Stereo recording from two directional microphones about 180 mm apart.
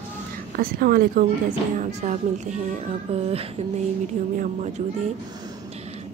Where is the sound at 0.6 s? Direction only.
55° right (ahead or behind).